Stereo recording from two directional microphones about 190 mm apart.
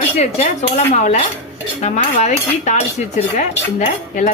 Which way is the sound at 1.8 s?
40° left (ahead or behind).